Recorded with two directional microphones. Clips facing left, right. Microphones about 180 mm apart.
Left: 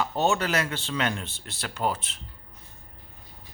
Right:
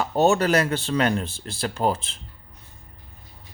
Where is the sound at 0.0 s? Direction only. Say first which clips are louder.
Right 6 dB; 40° right (ahead or behind).